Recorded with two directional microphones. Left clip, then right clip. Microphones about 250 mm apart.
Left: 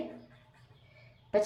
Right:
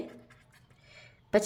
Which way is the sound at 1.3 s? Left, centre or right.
Right.